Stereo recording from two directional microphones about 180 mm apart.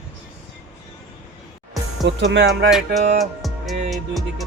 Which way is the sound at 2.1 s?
75° right (ahead or behind).